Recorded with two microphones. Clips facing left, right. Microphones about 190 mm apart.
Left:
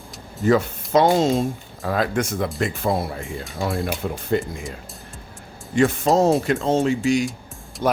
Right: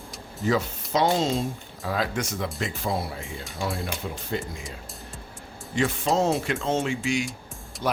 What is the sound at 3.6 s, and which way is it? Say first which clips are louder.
Speech: left 6 dB; 55° left (ahead or behind).